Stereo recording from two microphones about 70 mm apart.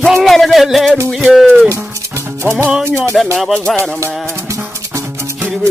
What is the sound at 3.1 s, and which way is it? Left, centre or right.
Speech, centre.